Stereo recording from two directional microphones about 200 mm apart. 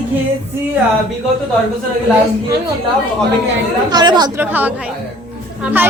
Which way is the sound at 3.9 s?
20° right (ahead or behind).